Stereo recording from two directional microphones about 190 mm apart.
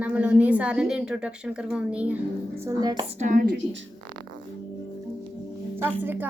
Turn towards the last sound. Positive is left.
turn(degrees=-10)  # may be behind; listen again after turning